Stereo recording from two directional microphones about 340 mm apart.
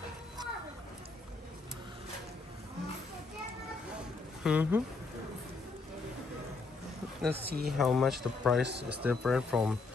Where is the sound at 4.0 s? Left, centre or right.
Centre.